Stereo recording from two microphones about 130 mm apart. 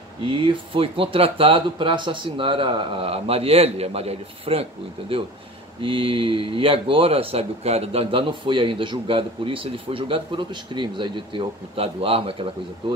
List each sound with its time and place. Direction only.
0.2 s speech: 40° right (ahead or behind)
5.8 s speech: 40° right (ahead or behind)